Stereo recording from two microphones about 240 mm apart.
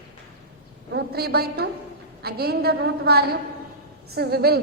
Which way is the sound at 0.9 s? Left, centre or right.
Right.